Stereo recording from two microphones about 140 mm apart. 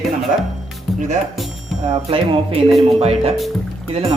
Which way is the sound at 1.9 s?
45° right (ahead or behind).